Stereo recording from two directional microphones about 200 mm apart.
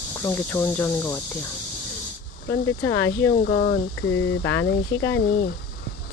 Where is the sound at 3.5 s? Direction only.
40° left (ahead or behind).